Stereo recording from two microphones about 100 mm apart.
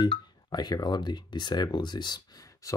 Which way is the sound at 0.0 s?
45° left (ahead or behind).